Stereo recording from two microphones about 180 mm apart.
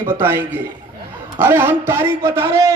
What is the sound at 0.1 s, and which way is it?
A man's voice, 10° right (ahead or behind).